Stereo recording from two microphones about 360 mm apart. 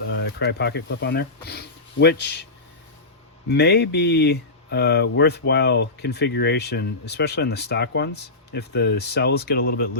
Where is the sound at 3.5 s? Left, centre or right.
Left.